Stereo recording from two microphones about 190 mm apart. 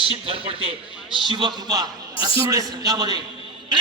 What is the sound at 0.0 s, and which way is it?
A man's voice, 30° right (ahead or behind).